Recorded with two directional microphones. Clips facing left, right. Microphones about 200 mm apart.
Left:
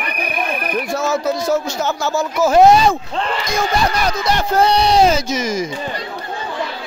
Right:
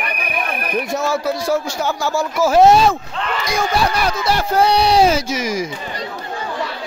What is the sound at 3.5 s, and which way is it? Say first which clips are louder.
Speech: right 1 dB; 5° right (ahead or behind).